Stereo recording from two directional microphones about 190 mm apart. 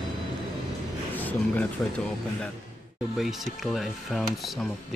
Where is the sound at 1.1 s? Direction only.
10° left (ahead or behind).